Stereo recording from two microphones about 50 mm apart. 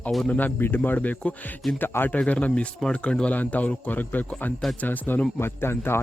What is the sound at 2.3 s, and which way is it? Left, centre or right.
Speech, left.